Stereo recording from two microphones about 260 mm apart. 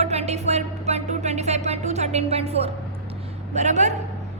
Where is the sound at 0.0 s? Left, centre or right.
Right.